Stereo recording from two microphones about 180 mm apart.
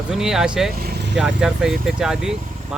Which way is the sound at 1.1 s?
5° right (ahead or behind).